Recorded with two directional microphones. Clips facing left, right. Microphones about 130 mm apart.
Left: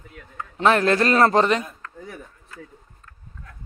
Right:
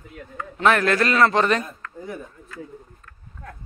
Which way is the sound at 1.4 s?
20° left (ahead or behind).